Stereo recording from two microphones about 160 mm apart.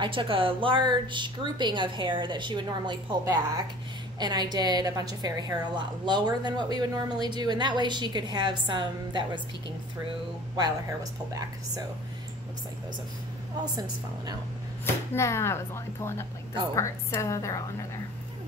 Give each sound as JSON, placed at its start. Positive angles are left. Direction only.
{"t": 0.0, "sound": "a woman's voice", "side_deg": -35}
{"t": 10.5, "sound": "a woman's voice", "side_deg": -20}
{"t": 13.6, "sound": "a woman's voice", "side_deg": -25}
{"t": 15.1, "sound": "a woman's voice", "side_deg": 15}